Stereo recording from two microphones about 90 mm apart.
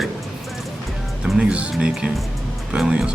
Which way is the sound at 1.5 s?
10° right (ahead or behind).